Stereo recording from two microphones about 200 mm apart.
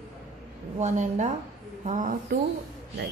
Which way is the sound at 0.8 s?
35° right (ahead or behind).